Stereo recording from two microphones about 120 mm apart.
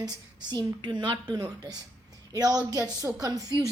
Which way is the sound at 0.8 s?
40° right (ahead or behind).